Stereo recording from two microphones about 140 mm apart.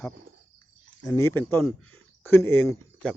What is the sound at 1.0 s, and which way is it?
Speech, 20° left (ahead or behind).